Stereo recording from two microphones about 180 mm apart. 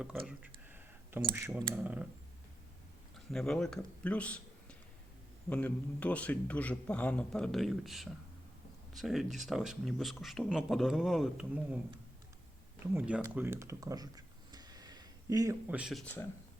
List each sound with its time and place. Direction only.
0.0 s a sound: 5° right (ahead or behind)
1.6 s speech: 10° right (ahead or behind)
3.3 s a man's voice: 5° left (ahead or behind)
12.8 s computer keyboard: 10° right (ahead or behind)
15.7 s speech: centre (ahead or behind)